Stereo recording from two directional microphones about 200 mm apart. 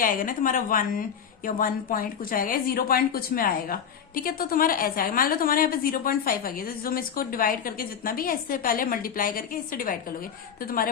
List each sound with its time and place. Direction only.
0.0 s a woman's voice: 45° left (ahead or behind)